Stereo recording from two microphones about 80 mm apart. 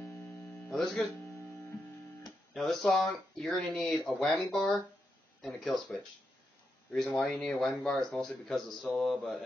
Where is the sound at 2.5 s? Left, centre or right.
Centre.